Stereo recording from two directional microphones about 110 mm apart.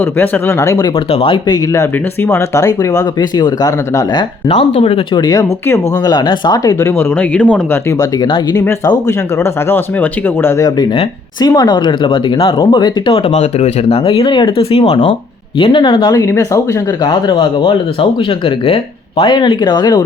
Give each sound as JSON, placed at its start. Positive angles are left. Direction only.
{"t": 0.0, "sound": "speech", "side_deg": 20}
{"t": 0.9, "sound": "speech", "side_deg": 55}
{"t": 1.5, "sound": "speech", "side_deg": 30}
{"t": 5.1, "sound": "speech", "side_deg": 35}
{"t": 7.0, "sound": "speech", "side_deg": 15}
{"t": 7.9, "sound": "speech", "side_deg": 30}
{"t": 11.3, "sound": "speech", "side_deg": 40}
{"t": 14.8, "sound": "speech", "side_deg": 45}
{"t": 16.1, "sound": "speech", "side_deg": 30}
{"t": 17.0, "sound": "speech", "side_deg": 40}